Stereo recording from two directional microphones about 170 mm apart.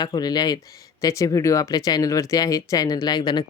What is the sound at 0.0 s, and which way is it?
Speech, 25° left (ahead or behind).